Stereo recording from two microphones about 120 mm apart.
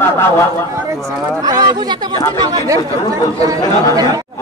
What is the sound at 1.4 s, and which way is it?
Speech, 35° right (ahead or behind).